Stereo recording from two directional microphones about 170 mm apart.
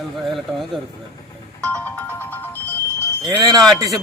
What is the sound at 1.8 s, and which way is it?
Music, 10° left (ahead or behind).